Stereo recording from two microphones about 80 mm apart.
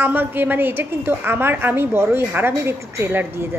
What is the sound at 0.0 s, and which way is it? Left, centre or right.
A woman's voice, right.